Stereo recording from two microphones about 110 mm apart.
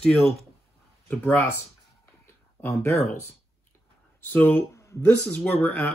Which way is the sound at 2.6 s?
20° left (ahead or behind).